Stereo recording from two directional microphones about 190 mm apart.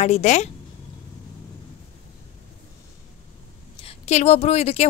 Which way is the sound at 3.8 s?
35° left (ahead or behind).